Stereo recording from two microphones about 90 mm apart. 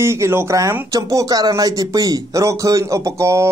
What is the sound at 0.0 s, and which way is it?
Speech, 30° right (ahead or behind).